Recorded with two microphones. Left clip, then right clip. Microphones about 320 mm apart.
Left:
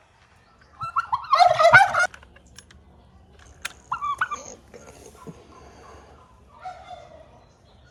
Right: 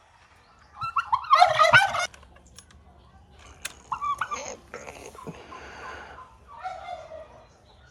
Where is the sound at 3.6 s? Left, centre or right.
Centre.